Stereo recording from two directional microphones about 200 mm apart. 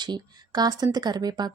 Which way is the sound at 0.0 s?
20° right (ahead or behind).